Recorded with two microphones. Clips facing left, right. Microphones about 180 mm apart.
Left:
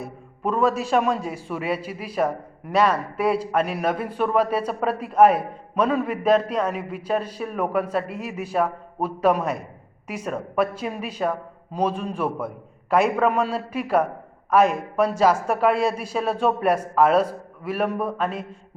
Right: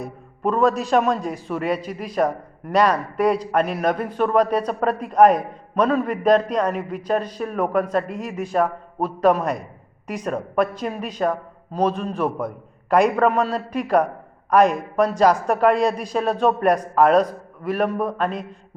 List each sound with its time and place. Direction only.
0.0 s a man's voice: 5° left (ahead or behind)